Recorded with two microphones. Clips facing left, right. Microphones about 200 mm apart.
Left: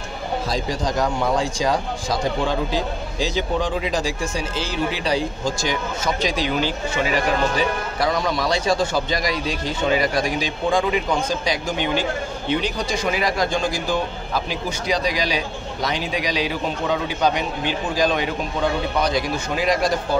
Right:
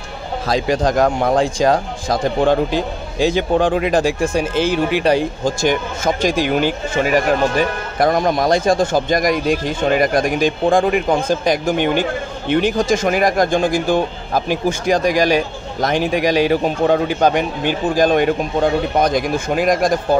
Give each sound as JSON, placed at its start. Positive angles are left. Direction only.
{"t": 0.5, "sound": "speech", "side_deg": -90}
{"t": 0.9, "sound": "speech", "side_deg": -55}